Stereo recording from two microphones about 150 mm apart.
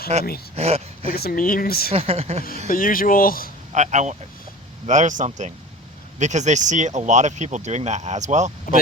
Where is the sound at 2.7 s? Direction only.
70° left (ahead or behind).